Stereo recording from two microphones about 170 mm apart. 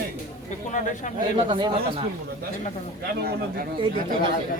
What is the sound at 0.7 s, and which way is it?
Speech, 45° left (ahead or behind).